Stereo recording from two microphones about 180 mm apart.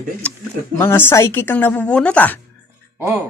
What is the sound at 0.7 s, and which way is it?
Speech, 10° left (ahead or behind).